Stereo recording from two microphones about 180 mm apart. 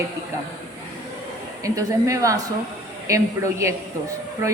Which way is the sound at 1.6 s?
15° right (ahead or behind).